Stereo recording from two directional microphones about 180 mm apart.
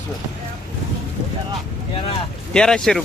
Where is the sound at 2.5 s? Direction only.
5° left (ahead or behind).